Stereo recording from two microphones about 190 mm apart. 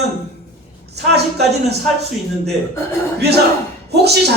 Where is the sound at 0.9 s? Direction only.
60° right (ahead or behind).